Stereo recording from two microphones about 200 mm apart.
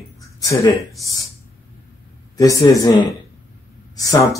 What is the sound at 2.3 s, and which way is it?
Speech, 15° left (ahead or behind).